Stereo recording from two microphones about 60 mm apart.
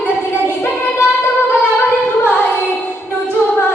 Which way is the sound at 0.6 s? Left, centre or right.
Left.